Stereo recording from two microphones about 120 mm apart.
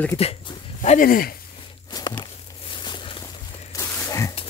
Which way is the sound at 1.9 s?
35° left (ahead or behind).